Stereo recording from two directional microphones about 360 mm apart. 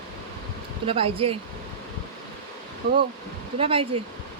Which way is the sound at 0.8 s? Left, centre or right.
Centre.